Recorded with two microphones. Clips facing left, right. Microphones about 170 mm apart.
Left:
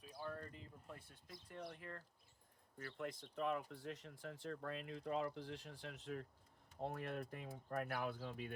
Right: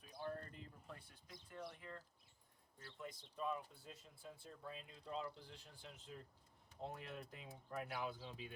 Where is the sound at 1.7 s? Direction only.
55° left (ahead or behind).